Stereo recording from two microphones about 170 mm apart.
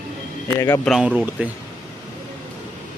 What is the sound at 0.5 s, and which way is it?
Speech, 20° left (ahead or behind).